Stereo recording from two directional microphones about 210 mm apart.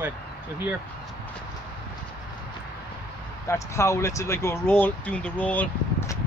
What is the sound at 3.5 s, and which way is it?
Speech, 15° left (ahead or behind).